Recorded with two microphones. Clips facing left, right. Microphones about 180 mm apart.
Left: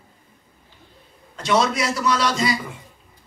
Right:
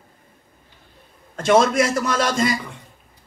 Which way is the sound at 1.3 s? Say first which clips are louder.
Right 5 dB; 50° right (ahead or behind).